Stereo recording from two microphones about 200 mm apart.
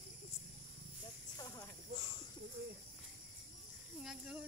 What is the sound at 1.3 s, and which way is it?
Snake, 15° left (ahead or behind).